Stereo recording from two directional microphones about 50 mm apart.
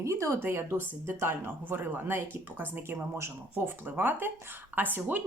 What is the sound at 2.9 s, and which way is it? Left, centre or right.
Speech, right.